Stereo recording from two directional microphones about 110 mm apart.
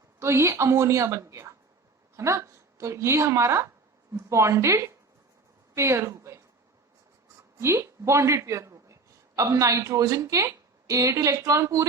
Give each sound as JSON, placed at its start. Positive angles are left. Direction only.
{"t": 0.2, "sound": "a woman's voice", "side_deg": -25}
{"t": 7.6, "sound": "a man's voice", "side_deg": -25}